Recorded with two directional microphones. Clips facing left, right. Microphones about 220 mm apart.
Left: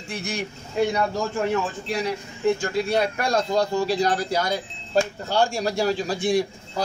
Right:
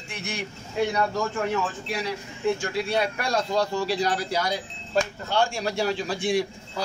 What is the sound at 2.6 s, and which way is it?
Speech, 45° left (ahead or behind).